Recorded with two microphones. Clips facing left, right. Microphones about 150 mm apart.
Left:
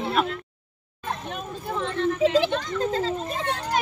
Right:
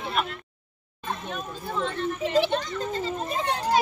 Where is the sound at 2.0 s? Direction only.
90° left.